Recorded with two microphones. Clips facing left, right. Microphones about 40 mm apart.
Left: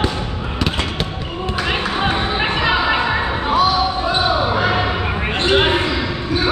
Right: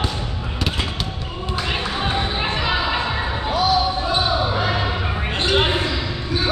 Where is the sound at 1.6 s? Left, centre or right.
Left.